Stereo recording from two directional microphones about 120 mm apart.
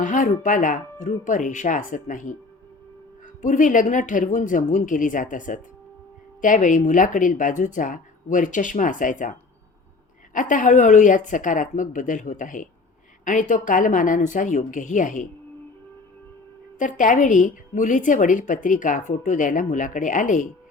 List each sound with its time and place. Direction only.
0.0 s a woman's voice: 90° left
3.4 s a woman's voice: 90° left
10.3 s a woman's voice: 90° left
16.7 s a woman's voice: 90° left